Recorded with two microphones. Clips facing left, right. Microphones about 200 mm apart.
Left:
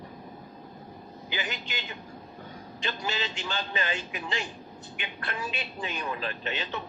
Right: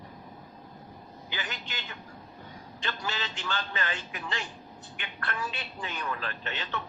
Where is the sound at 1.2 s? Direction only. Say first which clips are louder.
Left 4 dB; 15° left (ahead or behind).